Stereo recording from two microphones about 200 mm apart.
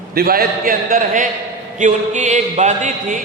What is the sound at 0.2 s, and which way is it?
A man's voice, 50° right (ahead or behind).